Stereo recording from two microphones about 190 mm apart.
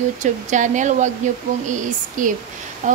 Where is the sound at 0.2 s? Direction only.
40° right (ahead or behind).